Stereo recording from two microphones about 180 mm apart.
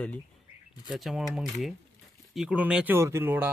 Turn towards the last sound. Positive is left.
turn(degrees=-10)  # may be behind; listen again after turning